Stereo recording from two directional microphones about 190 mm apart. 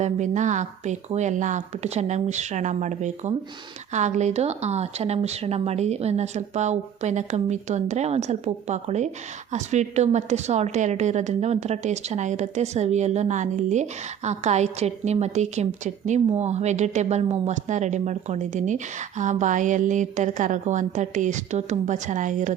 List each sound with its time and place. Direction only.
0.0 s a woman's voice: 40° right (ahead or behind)